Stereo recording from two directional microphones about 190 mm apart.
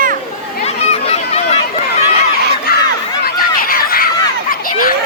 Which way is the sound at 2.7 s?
50° left (ahead or behind).